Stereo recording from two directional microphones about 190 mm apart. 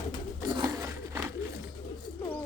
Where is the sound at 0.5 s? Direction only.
15° right (ahead or behind).